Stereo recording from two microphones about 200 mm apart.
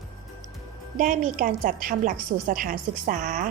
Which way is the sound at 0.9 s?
40° right (ahead or behind).